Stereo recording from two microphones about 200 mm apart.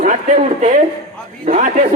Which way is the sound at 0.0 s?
35° right (ahead or behind).